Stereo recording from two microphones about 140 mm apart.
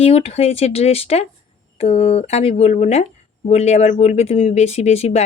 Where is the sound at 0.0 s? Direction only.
45° left (ahead or behind).